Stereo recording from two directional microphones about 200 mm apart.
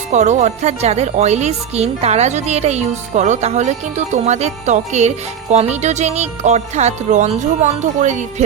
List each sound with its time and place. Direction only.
0.1 s speech: 35° right (ahead or behind)